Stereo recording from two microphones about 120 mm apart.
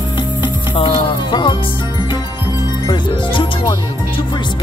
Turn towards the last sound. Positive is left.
turn(degrees=40)  # may be behind; listen again after turning